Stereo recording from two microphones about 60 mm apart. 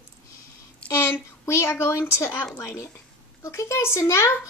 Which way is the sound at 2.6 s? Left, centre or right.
Left.